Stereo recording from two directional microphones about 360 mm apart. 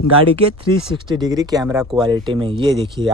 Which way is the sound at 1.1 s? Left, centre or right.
Centre.